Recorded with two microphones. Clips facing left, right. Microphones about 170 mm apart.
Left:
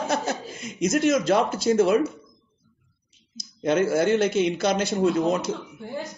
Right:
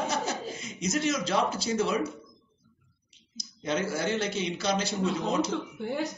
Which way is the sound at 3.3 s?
55° left (ahead or behind).